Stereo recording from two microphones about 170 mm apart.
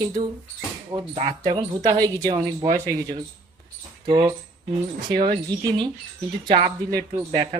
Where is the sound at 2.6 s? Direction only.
35° right (ahead or behind).